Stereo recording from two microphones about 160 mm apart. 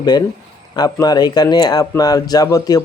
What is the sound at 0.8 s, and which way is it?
A man's voice, 25° left (ahead or behind).